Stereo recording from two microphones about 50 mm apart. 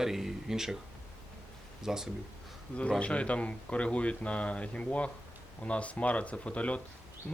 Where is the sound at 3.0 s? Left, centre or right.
Left.